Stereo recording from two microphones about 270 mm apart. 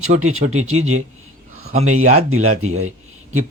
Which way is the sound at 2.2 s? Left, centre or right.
Right.